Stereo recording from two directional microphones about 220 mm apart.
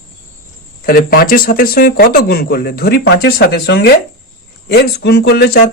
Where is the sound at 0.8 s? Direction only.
40° left (ahead or behind).